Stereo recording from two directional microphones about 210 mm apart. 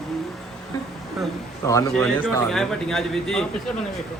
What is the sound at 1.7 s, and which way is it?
Speech, 15° left (ahead or behind).